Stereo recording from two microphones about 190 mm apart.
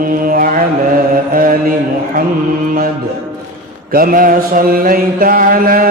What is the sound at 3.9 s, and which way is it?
Mantra, 50° right (ahead or behind).